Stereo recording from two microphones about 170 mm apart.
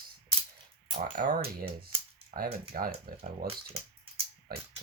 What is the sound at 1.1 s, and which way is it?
Speech, 50° right (ahead or behind).